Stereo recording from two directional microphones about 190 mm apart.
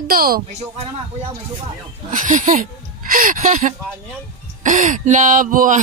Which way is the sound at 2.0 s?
45° right (ahead or behind).